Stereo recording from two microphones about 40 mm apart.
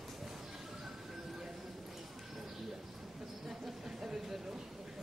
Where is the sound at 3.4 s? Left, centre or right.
Centre.